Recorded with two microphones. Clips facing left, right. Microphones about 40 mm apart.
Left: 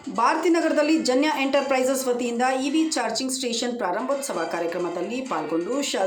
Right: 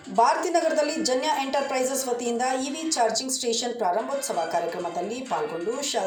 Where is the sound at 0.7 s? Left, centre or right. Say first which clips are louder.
Left 4 dB; left.